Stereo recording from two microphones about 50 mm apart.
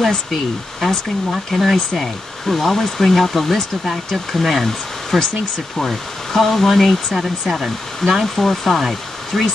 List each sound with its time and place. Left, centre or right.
0.0 s speech: centre